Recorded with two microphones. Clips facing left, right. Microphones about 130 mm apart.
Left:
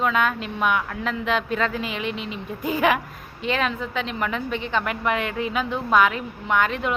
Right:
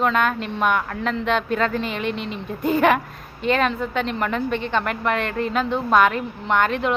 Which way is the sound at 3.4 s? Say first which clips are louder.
Right 5 dB; 45° right (ahead or behind).